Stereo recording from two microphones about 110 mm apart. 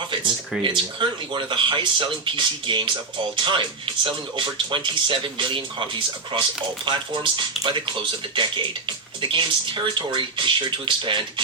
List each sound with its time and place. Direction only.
0.6 s speech: 50° right (ahead or behind)